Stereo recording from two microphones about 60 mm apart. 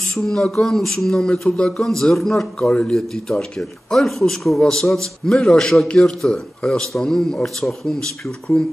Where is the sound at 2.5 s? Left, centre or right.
Centre.